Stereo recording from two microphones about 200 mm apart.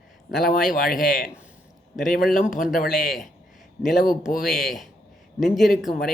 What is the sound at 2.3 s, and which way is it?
Speech, 45° left (ahead or behind).